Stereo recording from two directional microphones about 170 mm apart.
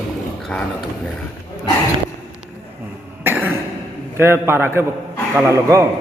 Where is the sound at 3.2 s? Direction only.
10° right (ahead or behind).